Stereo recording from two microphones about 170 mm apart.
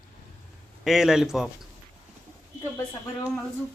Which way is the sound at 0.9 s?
Centre (ahead or behind).